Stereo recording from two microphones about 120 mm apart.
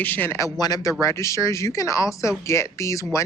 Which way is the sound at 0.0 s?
15° left (ahead or behind).